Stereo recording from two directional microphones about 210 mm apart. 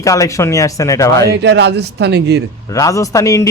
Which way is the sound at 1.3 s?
55° right (ahead or behind).